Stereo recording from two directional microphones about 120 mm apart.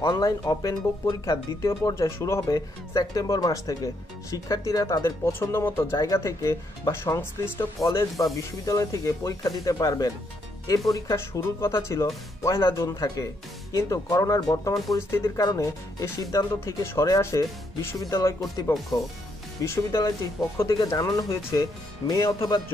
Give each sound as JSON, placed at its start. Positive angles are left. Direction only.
{"t": 0.0, "sound": "speech", "side_deg": 30}
{"t": 19.6, "sound": "speech", "side_deg": 25}
{"t": 20.6, "sound": "speech", "side_deg": 35}